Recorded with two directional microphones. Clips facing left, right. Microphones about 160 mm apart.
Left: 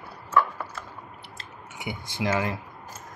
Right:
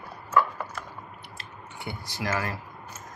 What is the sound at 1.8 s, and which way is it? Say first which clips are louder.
Speech: left 4 dB; 20° left (ahead or behind).